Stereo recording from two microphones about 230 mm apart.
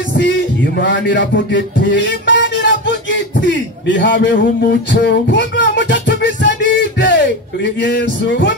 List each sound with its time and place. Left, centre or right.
0.2 s a man's voice: left
5.0 s music: left